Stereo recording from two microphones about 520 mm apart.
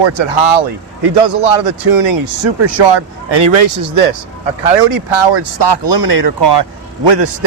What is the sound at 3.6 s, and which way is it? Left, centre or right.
Speech, right.